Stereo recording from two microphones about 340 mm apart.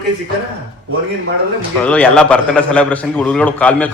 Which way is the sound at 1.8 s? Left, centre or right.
Centre.